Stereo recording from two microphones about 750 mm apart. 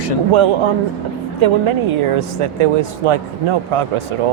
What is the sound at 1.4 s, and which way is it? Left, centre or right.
Speech, right.